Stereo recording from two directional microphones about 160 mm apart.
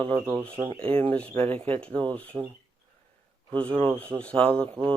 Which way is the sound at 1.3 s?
35° right (ahead or behind).